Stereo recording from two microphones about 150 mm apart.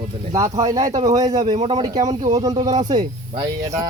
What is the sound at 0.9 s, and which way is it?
Speech, 50° right (ahead or behind).